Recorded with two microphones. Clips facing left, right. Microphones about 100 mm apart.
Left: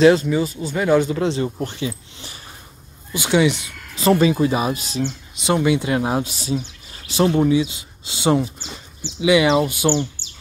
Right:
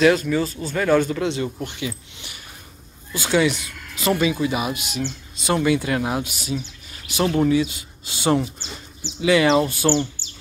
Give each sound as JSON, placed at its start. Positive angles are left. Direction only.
{"t": 0.0, "sound": "speech", "side_deg": 25}
{"t": 1.1, "sound": "speech", "side_deg": 30}
{"t": 3.1, "sound": "speech", "side_deg": 20}
{"t": 5.0, "sound": "speech", "side_deg": 20}